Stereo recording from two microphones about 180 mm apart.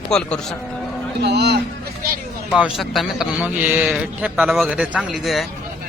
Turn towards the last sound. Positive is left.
turn(degrees=0)  # may be behind; listen again after turning